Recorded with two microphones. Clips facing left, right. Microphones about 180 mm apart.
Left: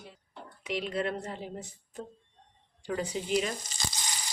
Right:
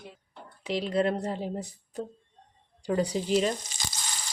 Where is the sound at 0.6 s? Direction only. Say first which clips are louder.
Right 5 dB; 30° right (ahead or behind).